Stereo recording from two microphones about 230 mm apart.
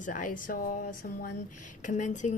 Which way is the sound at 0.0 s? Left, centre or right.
Left.